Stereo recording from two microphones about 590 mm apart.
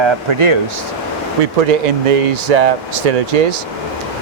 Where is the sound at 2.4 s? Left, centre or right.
Right.